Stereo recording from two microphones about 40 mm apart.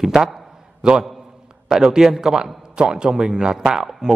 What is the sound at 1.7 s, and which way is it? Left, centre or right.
A man's voice, centre.